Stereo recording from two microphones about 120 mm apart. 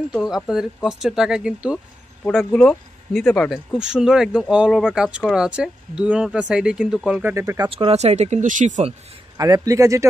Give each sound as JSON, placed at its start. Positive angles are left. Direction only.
{"t": 0.8, "sound": "speech", "side_deg": -5}
{"t": 2.2, "sound": "speech", "side_deg": 5}
{"t": 7.3, "sound": "a man's voice", "side_deg": -25}
{"t": 7.7, "sound": "speech", "side_deg": -60}
{"t": 9.4, "sound": "a man's voice", "side_deg": -30}